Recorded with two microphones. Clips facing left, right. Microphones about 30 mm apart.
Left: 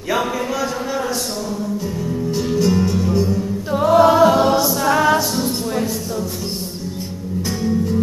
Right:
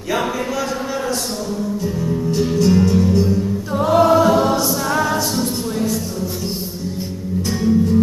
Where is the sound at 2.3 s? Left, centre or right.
Centre.